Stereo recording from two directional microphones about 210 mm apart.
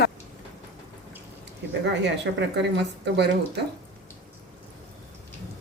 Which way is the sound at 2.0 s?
55° right (ahead or behind).